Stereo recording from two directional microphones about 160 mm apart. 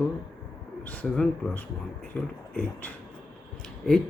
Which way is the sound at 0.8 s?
10° left (ahead or behind).